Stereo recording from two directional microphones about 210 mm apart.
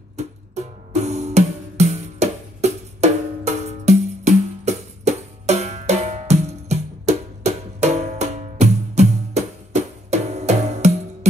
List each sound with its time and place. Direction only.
0.1 s music: 30° right (ahead or behind)